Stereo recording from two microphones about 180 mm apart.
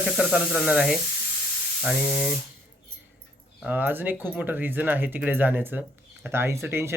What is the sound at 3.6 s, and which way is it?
Speech, 10° right (ahead or behind).